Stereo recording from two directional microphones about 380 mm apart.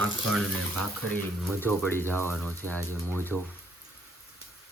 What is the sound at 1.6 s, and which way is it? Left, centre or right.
Speech, centre.